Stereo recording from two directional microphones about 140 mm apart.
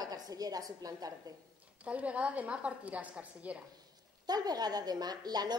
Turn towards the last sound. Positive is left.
turn(degrees=-30)  # may be behind; listen again after turning